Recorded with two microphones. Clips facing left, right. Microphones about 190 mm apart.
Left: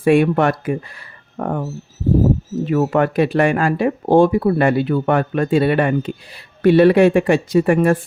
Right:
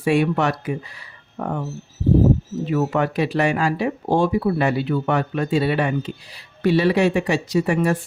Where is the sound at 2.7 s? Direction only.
55° left (ahead or behind).